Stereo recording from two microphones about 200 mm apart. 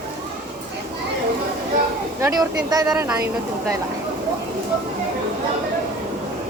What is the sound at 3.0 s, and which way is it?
Speech, 10° right (ahead or behind).